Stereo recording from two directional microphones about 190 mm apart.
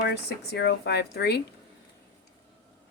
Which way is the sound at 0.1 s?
60° left (ahead or behind).